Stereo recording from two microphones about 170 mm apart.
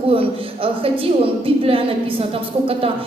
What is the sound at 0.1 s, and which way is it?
A woman's voice, 35° right (ahead or behind).